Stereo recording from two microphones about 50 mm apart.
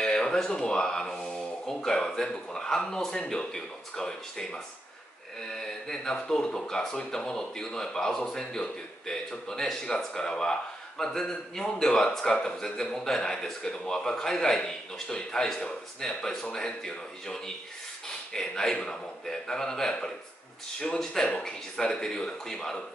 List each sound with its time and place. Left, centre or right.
0.0 s speech: centre